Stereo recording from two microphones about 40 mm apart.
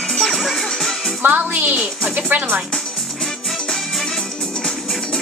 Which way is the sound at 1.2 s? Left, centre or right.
Right.